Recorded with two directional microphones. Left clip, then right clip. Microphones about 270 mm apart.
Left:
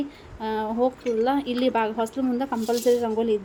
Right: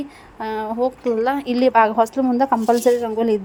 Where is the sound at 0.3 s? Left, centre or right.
Centre.